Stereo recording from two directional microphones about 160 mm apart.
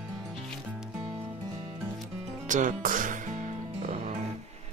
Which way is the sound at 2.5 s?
55° right (ahead or behind).